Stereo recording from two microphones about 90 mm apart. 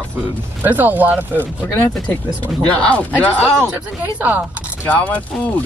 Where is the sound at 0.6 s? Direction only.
20° right (ahead or behind).